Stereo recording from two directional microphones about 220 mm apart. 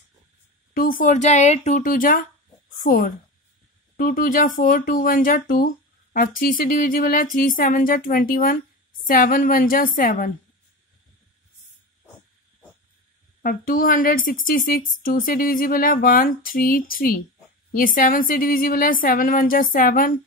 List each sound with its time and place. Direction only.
0.7 s a woman's voice: 40° left (ahead or behind)
13.4 s speech: 40° left (ahead or behind)